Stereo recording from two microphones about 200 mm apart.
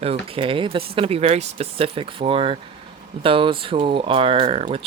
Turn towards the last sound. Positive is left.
turn(degrees=-30)  # may be behind; listen again after turning